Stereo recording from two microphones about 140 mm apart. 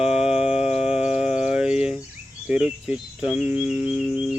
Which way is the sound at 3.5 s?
50° left (ahead or behind).